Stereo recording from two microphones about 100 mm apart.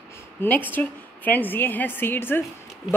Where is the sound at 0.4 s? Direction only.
20° left (ahead or behind).